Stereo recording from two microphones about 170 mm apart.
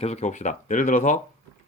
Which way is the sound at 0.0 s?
40° left (ahead or behind).